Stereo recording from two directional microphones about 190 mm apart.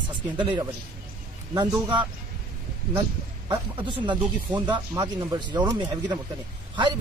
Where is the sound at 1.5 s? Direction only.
25° right (ahead or behind).